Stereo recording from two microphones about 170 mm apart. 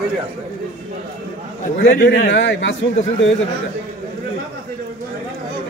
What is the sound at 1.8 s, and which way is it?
Speech, 55° left (ahead or behind).